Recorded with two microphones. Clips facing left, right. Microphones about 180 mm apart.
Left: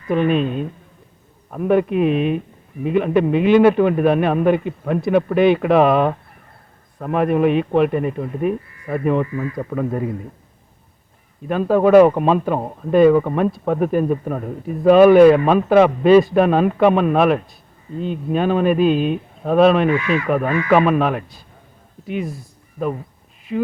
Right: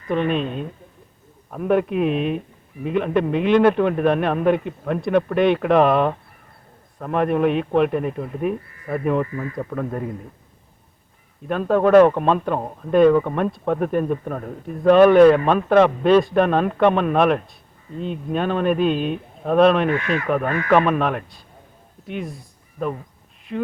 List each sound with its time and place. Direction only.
0.1 s speech: 5° left (ahead or behind)
11.4 s speech: 5° left (ahead or behind)
20.0 s speech: 50° right (ahead or behind)
20.2 s speech: 5° left (ahead or behind)